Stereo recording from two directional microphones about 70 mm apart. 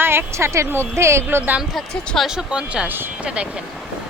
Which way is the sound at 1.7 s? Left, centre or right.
Centre.